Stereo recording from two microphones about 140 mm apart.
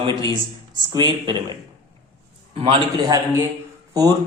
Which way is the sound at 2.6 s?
35° right (ahead or behind).